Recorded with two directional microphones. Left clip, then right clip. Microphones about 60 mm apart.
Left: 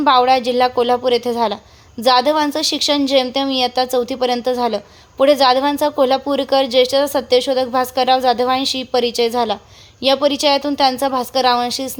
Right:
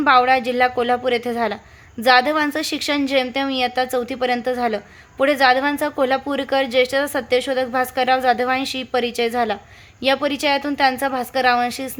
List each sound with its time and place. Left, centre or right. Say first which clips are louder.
0.0 s a woman's voice: left 2 dB; centre
11.5 s a woman's voice: left 2 dB; centre